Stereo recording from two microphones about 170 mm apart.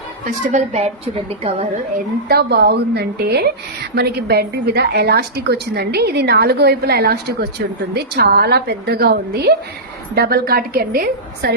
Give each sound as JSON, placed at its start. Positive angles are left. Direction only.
{"t": 0.3, "sound": "a woman's voice", "side_deg": -40}
{"t": 2.3, "sound": "a woman's voice", "side_deg": -70}